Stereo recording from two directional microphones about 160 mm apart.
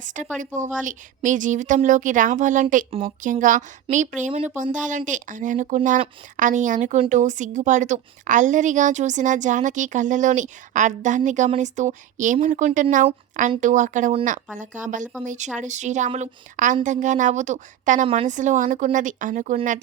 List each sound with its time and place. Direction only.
0.0 s a woman's voice: 50° right (ahead or behind)
4.3 s speech: 35° right (ahead or behind)
4.5 s a woman's voice: 50° right (ahead or behind)